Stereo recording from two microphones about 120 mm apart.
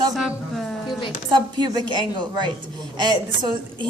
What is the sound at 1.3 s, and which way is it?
A woman's voice, 35° right (ahead or behind).